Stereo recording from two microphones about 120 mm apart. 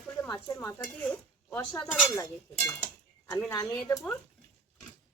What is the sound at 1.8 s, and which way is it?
Speech, 5° left (ahead or behind).